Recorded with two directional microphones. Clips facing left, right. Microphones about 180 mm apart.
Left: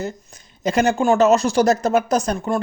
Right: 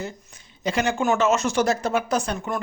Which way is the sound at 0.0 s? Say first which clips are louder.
Left 5 dB; 40° left (ahead or behind).